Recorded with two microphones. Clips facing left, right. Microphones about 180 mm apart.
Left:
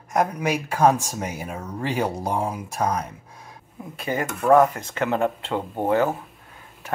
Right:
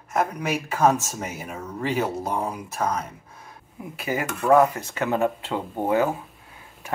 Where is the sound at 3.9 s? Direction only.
5° right (ahead or behind).